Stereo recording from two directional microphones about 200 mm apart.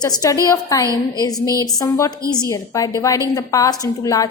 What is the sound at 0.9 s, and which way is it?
Speech, 15° right (ahead or behind).